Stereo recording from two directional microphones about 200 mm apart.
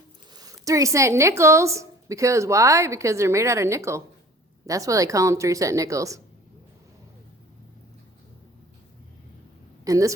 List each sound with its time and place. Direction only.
0.3 s a woman's voice: 15° right (ahead or behind)
9.8 s speech: 15° right (ahead or behind)